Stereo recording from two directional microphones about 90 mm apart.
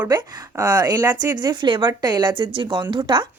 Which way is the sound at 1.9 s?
50° right (ahead or behind).